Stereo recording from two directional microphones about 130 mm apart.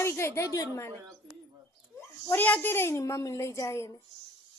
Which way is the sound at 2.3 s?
15° left (ahead or behind).